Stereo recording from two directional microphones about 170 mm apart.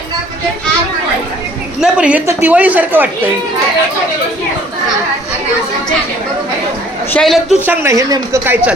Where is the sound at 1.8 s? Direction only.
5° right (ahead or behind).